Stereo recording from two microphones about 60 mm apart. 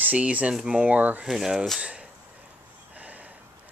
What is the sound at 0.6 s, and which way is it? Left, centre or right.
Speech, centre.